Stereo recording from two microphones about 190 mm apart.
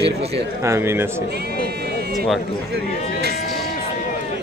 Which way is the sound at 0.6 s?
15° right (ahead or behind).